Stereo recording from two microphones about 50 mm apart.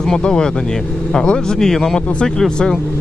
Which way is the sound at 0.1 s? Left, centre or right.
Centre.